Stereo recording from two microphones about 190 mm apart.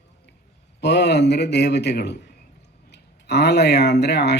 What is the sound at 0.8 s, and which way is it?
Speech, 60° left (ahead or behind).